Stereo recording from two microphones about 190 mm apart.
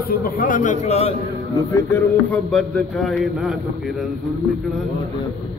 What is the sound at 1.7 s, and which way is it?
Speech, 10° left (ahead or behind).